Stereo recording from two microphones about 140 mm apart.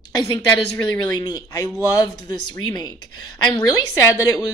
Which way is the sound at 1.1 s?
30° left (ahead or behind).